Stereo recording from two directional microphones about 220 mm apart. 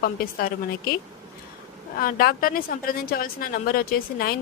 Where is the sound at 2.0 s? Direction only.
40° left (ahead or behind).